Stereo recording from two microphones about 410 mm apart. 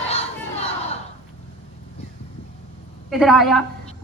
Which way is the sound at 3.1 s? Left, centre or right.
Centre.